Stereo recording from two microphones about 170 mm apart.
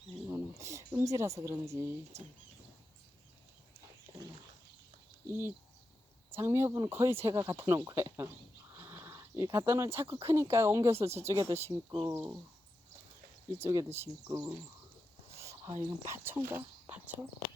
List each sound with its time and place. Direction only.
0.3 s a sound: 15° right (ahead or behind)
2.1 s speech: 15° right (ahead or behind)
5.3 s speech: 10° right (ahead or behind)
13.6 s speech: 15° right (ahead or behind)
15.3 s a sound: 15° right (ahead or behind)
15.8 s speech: 15° right (ahead or behind)